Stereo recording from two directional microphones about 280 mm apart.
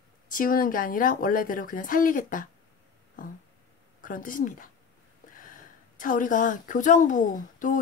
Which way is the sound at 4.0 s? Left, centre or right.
Left.